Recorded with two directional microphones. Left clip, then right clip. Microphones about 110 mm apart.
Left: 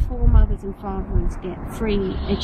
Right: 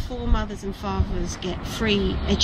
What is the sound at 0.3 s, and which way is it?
Speech, 20° right (ahead or behind).